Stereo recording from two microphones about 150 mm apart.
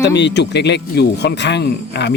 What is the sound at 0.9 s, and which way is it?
Speech, 90° left.